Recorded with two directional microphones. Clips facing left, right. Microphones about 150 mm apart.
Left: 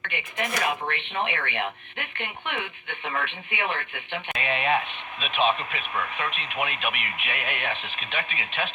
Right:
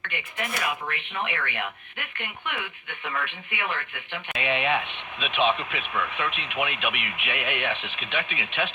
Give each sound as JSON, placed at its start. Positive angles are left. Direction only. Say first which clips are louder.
{"t": 0.1, "sound": "speech", "louder": "left 3 dB", "side_deg": 20}
{"t": 4.4, "sound": "speech", "louder": "even", "side_deg": 40}